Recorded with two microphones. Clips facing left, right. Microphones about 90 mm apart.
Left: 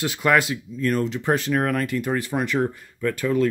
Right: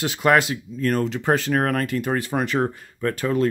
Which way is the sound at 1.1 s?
35° right (ahead or behind).